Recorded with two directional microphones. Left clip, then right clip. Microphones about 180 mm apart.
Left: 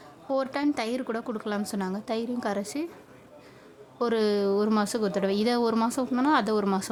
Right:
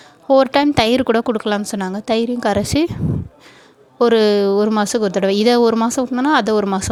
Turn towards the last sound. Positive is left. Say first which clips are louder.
# right 9 dB
turn(degrees=-35)  # may be behind; listen again after turning